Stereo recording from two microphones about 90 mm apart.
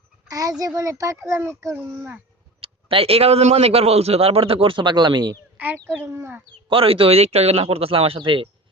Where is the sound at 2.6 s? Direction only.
90° right.